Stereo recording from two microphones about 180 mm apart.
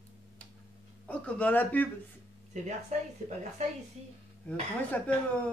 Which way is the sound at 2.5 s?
40° right (ahead or behind).